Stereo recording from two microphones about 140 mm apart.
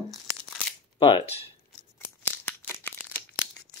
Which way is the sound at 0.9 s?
40° left (ahead or behind).